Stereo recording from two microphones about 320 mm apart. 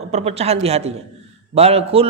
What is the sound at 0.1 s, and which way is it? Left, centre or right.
A man's voice, centre.